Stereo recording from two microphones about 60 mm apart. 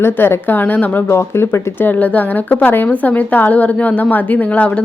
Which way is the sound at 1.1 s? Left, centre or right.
Left.